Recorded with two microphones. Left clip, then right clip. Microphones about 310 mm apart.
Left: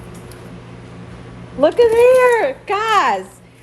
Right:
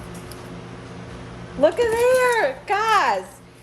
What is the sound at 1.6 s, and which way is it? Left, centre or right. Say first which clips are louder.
Speech: left 7 dB; centre.